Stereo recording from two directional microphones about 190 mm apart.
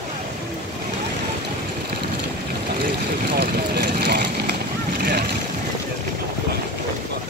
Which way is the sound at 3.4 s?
55° right (ahead or behind).